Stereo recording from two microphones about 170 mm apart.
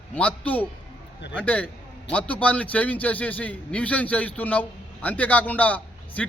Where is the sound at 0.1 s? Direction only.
10° left (ahead or behind).